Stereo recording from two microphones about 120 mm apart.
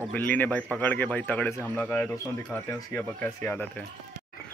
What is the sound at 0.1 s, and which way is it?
Speech, 15° left (ahead or behind).